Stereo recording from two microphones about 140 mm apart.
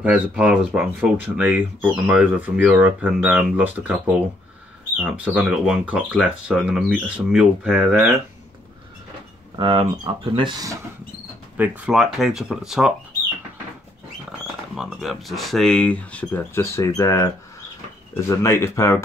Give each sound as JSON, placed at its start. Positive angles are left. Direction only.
{"t": 0.0, "sound": "speech", "side_deg": -5}
{"t": 9.6, "sound": "speech", "side_deg": -35}
{"t": 11.5, "sound": "speech", "side_deg": -10}
{"t": 14.8, "sound": "speech", "side_deg": 0}